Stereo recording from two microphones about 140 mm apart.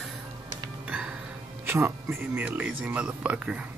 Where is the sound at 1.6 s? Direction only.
15° right (ahead or behind).